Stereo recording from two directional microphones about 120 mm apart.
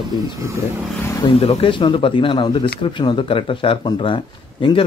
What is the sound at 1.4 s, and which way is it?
A man's voice, 55° left (ahead or behind).